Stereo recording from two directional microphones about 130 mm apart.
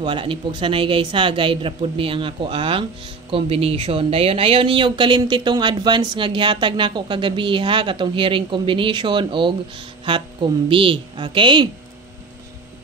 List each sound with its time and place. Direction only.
0.0 s speech: 40° right (ahead or behind)